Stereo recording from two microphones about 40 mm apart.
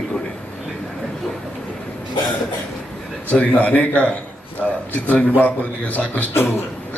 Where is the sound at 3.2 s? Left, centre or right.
Left.